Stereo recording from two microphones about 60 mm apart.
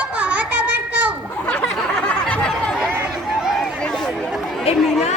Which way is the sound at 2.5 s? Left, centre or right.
Centre.